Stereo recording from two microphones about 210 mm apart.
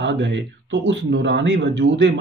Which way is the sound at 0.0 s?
55° right (ahead or behind).